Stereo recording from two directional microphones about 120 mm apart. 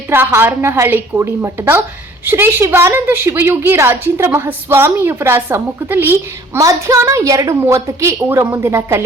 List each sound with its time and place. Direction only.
0.1 s a woman's voice: 20° right (ahead or behind)